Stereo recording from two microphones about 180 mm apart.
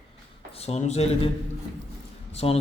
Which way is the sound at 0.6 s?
35° left (ahead or behind).